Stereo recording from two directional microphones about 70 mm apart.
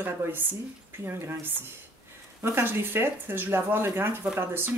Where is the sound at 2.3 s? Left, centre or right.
Right.